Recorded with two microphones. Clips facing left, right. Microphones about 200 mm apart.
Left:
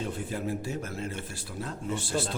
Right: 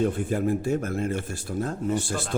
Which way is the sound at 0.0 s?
50° right (ahead or behind).